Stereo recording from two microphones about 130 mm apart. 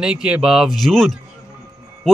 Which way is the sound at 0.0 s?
5° right (ahead or behind).